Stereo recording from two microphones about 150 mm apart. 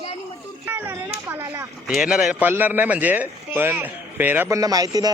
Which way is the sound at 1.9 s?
5° right (ahead or behind).